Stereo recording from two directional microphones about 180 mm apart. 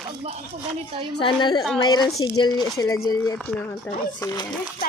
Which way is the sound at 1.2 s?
25° left (ahead or behind).